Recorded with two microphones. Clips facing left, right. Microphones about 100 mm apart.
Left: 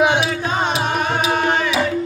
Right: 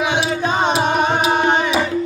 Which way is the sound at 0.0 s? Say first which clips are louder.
Left 3 dB; 55° left (ahead or behind).